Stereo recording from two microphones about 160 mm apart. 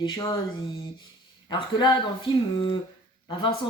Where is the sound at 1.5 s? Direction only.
30° left (ahead or behind).